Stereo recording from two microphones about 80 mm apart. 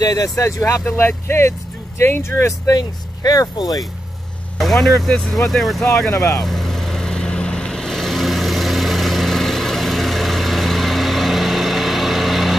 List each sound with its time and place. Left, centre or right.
0.0 s speech: left
0.4 s speech: left
4.6 s speech: centre
6.1 s speech: left
6.4 s vehicle: centre